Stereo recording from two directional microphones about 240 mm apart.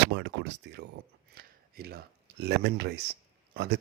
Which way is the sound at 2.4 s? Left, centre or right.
Right.